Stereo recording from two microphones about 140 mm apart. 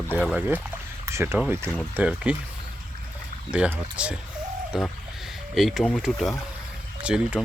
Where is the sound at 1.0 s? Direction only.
20° right (ahead or behind).